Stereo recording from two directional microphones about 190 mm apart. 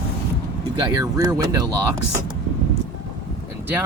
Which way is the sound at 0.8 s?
20° right (ahead or behind).